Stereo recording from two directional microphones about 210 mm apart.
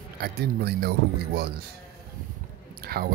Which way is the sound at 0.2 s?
50° right (ahead or behind).